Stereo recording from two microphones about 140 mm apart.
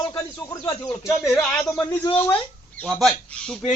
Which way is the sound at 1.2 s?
5° left (ahead or behind).